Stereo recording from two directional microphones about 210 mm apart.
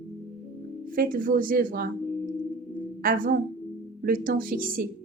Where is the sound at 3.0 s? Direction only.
40° right (ahead or behind).